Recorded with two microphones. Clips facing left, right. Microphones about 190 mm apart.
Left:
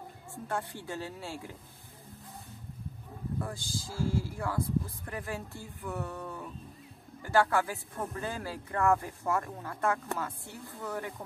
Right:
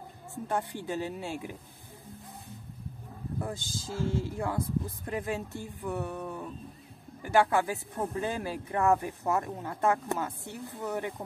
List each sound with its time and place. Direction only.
0.5 s speech: 20° right (ahead or behind)
3.3 s speech: 20° right (ahead or behind)